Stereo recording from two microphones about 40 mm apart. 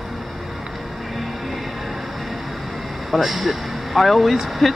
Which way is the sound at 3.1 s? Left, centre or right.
Centre.